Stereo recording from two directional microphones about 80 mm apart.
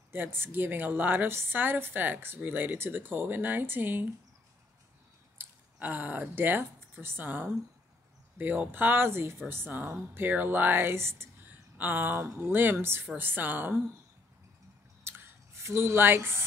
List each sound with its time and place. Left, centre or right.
0.1 s a woman's voice: right
5.4 s a woman's voice: right
15.0 s a sound: right